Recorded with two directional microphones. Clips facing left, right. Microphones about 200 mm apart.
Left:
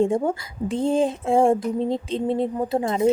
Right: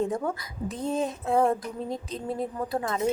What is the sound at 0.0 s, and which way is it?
A woman's voice, 25° left (ahead or behind).